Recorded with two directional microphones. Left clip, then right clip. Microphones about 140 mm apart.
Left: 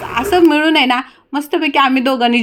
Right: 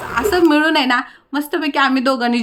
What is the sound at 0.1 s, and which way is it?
A woman's voice, 20° left (ahead or behind).